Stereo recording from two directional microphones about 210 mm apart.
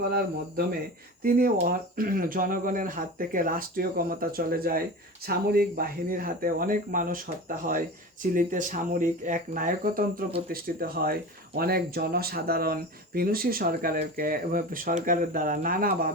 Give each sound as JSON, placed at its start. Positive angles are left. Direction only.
{"t": 1.2, "sound": "speech", "side_deg": -45}